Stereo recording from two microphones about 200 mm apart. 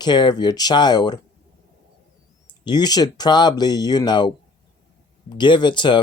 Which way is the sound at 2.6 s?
20° left (ahead or behind).